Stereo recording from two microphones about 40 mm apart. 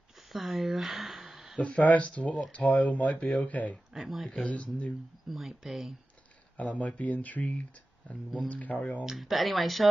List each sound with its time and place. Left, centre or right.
0.3 s speech: centre
1.6 s speech: left
3.9 s speech: centre
4.5 s speech: left
5.3 s speech: centre
6.5 s speech: left
9.0 s speech: centre